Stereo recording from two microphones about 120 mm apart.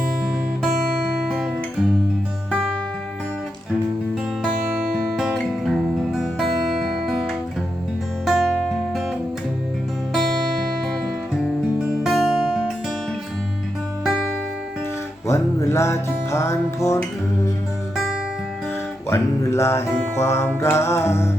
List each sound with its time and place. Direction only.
4.4 s music: 5° right (ahead or behind)
8.2 s music: 5° right (ahead or behind)
11.8 s music: 5° right (ahead or behind)
14.0 s music: 5° right (ahead or behind)
15.3 s music: 25° left (ahead or behind)
19.1 s music: 25° left (ahead or behind)